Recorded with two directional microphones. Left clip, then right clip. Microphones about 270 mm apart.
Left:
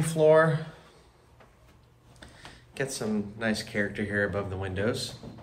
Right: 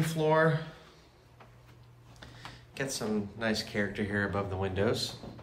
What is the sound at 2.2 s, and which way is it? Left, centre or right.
Speech, centre.